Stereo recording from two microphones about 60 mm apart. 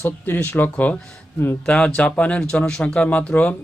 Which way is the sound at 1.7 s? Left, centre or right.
Centre.